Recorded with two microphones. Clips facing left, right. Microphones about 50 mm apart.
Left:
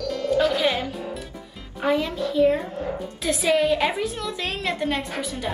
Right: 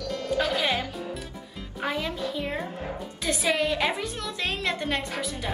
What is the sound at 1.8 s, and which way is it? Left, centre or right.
A woman's voice, centre.